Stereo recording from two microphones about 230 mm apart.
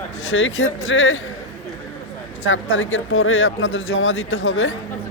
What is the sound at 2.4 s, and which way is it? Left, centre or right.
A man's voice, left.